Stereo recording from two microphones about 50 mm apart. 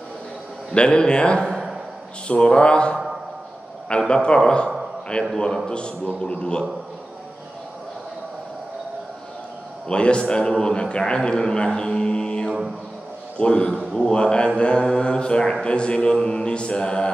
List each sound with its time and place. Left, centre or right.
0.7 s speech: centre
4.1 s a man's voice: centre
9.8 s a man's voice: left